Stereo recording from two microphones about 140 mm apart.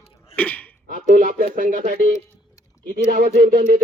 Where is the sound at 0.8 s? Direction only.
75° right (ahead or behind).